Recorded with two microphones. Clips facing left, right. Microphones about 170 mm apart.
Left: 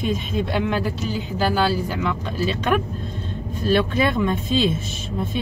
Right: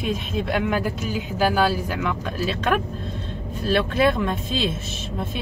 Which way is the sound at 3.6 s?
Centre (ahead or behind).